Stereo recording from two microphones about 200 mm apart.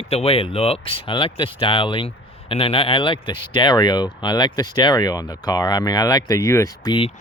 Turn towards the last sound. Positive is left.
turn(degrees=20)  # may be behind; listen again after turning